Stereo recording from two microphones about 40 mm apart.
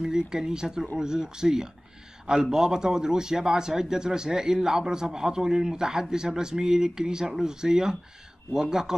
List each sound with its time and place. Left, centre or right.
0.0 s speech: centre